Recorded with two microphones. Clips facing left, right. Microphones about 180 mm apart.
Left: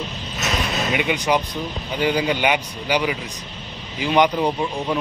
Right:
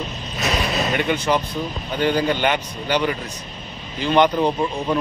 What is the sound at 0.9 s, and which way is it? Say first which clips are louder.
Speech: left 1 dB; 10° left (ahead or behind).